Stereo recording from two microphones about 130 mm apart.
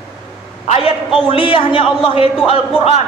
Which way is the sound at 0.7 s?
45° left (ahead or behind).